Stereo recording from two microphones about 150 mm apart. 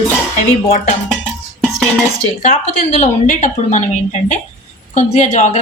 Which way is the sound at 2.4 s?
55° left (ahead or behind).